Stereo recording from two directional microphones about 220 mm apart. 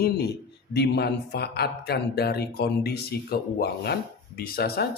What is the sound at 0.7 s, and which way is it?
Speech, 50° left (ahead or behind).